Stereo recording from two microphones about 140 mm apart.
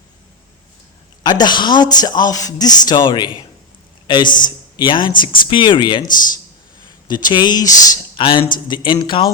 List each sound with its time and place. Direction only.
1.2 s a man's voice: 30° left (ahead or behind)
7.1 s speech: 30° left (ahead or behind)